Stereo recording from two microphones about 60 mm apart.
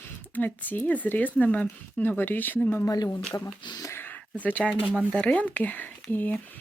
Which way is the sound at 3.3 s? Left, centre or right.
Left.